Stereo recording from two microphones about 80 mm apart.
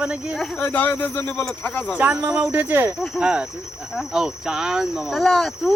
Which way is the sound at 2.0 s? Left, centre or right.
Centre.